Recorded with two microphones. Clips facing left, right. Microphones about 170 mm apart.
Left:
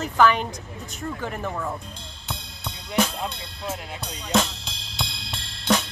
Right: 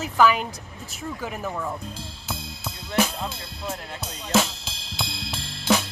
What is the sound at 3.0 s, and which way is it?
Drum kit, centre (ahead or behind).